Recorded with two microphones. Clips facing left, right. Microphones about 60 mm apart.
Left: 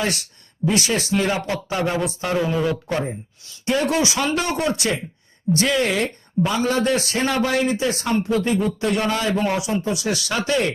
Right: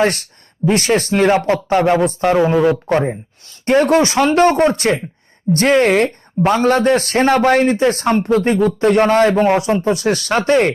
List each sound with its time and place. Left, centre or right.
0.0 s speech: right
1.4 s speech: right
1.7 s a man's voice: right